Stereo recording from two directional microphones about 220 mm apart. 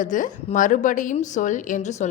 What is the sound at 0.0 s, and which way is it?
A woman's voice, 35° left (ahead or behind).